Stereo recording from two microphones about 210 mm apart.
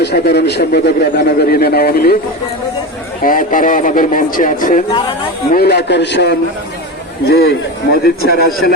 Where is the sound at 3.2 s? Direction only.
40° left (ahead or behind).